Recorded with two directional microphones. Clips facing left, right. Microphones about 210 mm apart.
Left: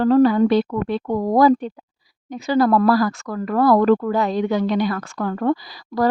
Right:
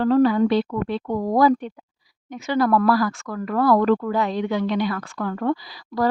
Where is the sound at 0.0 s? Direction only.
40° left (ahead or behind).